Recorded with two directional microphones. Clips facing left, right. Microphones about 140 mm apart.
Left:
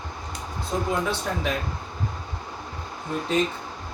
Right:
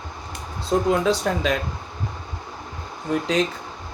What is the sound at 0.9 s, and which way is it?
Speech, 90° right.